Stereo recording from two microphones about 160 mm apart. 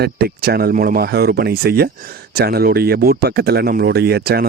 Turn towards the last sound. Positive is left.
turn(degrees=-80)